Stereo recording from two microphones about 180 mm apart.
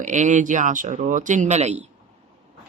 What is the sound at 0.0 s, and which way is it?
A woman's voice, 40° right (ahead or behind).